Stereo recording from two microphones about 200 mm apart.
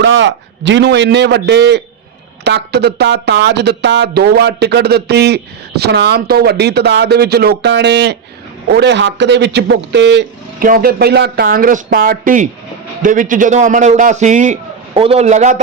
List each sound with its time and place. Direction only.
0.0 s speech: 65° right (ahead or behind)
10.6 s a man's voice: 45° right (ahead or behind)